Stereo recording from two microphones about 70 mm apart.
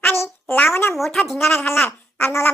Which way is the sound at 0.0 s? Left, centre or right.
Left.